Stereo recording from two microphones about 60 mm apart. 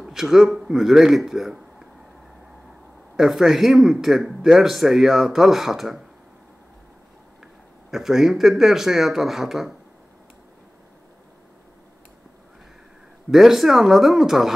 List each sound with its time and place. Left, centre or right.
0.0 s speech: centre
3.2 s speech: centre
7.9 s speech: centre
13.3 s speech: centre